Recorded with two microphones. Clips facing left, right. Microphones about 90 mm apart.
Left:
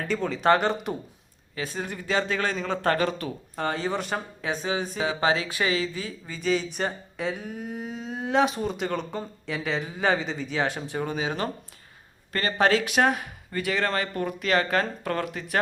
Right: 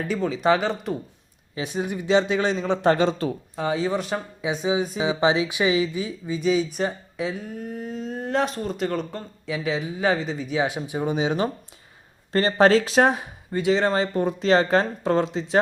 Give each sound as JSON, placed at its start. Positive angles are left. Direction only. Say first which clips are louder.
{"t": 0.1, "sound": "speech", "louder": "even", "side_deg": -5}
{"t": 1.5, "sound": "speech", "louder": "right 5 dB", "side_deg": -20}
{"t": 3.5, "sound": "speech", "louder": "right 2 dB", "side_deg": -5}
{"t": 4.4, "sound": "speech", "louder": "right 6 dB", "side_deg": -10}